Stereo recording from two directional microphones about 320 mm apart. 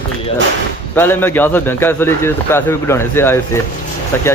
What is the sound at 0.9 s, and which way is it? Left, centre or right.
Speech, centre.